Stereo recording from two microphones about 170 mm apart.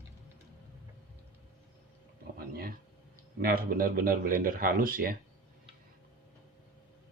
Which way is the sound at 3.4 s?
60° right (ahead or behind).